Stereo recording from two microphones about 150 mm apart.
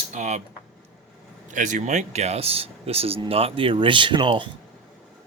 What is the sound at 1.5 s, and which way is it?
A man's voice, 55° right (ahead or behind).